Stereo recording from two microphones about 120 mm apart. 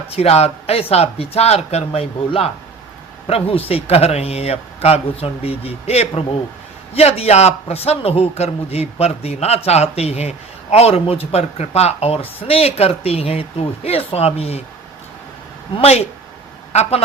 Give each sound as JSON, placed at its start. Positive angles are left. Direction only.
{"t": 0.1, "sound": "a man's voice", "side_deg": 60}
{"t": 15.7, "sound": "a man's voice", "side_deg": 60}